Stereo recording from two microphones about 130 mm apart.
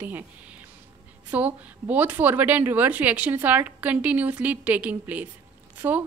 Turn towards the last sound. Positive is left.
turn(degrees=-15)  # may be behind; listen again after turning